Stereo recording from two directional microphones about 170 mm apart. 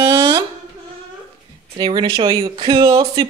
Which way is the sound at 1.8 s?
25° right (ahead or behind).